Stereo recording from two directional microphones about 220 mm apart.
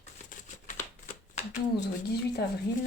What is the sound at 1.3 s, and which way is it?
Speech, 30° left (ahead or behind).